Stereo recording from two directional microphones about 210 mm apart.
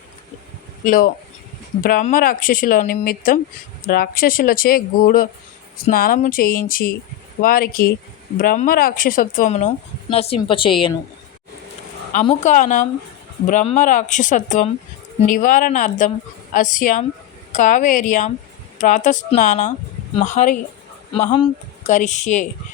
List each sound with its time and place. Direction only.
0.9 s speech: 40° left (ahead or behind); by 10.9 s 25° left (ahead or behind)
12.2 s speech: 30° left (ahead or behind)